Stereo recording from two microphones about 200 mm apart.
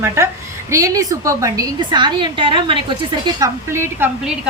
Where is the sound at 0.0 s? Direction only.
15° right (ahead or behind).